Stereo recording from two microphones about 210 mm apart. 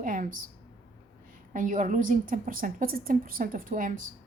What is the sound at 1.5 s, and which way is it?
Speech, 40° right (ahead or behind).